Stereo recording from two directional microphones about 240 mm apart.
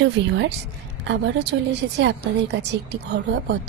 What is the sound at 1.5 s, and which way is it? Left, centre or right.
A woman's voice, right.